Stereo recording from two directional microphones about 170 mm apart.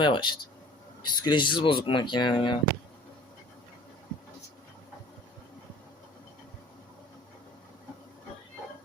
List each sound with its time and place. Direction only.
0.0 s speech: 30° left (ahead or behind)